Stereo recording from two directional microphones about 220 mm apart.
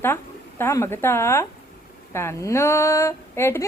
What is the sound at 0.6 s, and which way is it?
A woman's voice, 10° left (ahead or behind).